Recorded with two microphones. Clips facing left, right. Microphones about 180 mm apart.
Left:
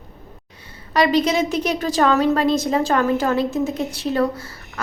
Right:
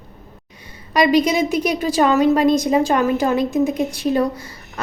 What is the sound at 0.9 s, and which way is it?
A woman's voice, 15° right (ahead or behind).